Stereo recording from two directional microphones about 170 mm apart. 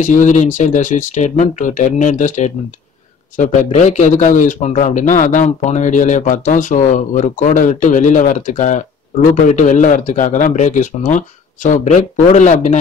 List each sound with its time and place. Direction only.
0.0 s a man's voice: 45° left (ahead or behind)